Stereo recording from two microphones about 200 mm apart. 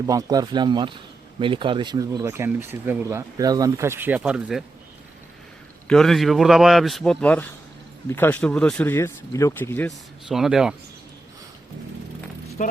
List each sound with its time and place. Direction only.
0.0 s speech: 15° right (ahead or behind)
5.9 s speech: centre (ahead or behind)
10.2 s speech: centre (ahead or behind)
12.6 s speech: 40° left (ahead or behind)